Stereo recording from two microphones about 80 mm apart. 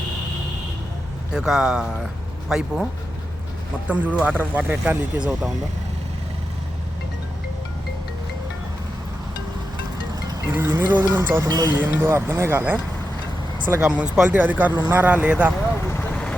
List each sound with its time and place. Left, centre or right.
1.3 s speech: centre
3.8 s speech: centre
10.6 s speech: right
11.4 s speech: right
11.7 s speech: right
13.8 s speech: centre